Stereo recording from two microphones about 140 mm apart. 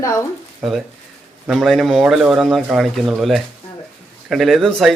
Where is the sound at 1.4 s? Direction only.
Centre (ahead or behind).